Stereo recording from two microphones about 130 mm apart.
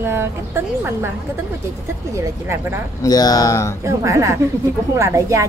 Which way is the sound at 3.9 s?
25° right (ahead or behind).